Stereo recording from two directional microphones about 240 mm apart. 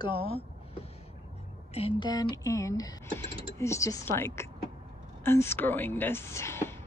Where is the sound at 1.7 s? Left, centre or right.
Left.